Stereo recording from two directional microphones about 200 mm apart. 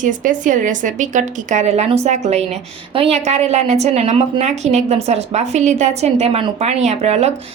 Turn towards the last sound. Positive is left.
turn(degrees=-30)  # may be behind; listen again after turning